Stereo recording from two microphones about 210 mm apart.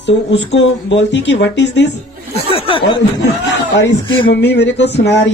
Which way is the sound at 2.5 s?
25° left (ahead or behind).